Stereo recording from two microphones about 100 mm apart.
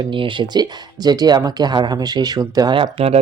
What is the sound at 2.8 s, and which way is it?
Speech, 85° right.